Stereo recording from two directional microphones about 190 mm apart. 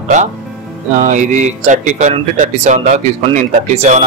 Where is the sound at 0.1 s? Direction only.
40° right (ahead or behind).